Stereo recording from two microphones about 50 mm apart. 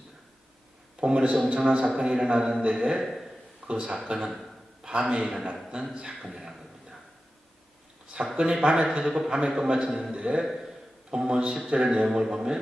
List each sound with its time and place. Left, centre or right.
1.0 s a man's voice: centre
3.0 s a sound: centre
3.7 s a man's voice: centre
8.1 s a man's voice: centre
10.4 s a man's voice: centre
11.1 s a man's voice: centre